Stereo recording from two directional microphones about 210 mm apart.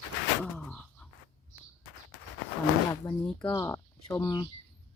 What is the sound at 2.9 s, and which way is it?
Speech, 10° left (ahead or behind).